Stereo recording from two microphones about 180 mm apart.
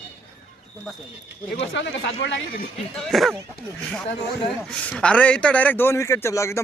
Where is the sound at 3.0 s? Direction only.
Centre (ahead or behind).